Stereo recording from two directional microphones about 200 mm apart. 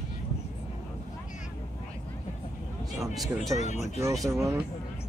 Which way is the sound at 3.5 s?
35° left (ahead or behind).